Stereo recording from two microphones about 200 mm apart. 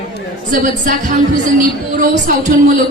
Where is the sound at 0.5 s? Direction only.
40° right (ahead or behind).